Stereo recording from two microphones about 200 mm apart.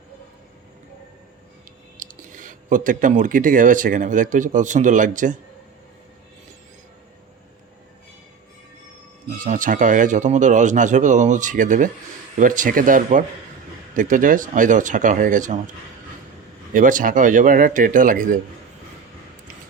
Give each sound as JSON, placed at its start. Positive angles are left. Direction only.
{"t": 2.0, "sound": "speech", "side_deg": -40}
{"t": 9.4, "sound": "speech", "side_deg": -40}
{"t": 16.7, "sound": "speech", "side_deg": -40}